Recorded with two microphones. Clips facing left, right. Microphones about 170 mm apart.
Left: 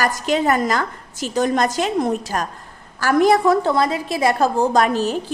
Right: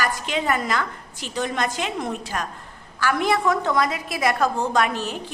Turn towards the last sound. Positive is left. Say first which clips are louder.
# left 5 dB
turn(degrees=35)  # may be behind; listen again after turning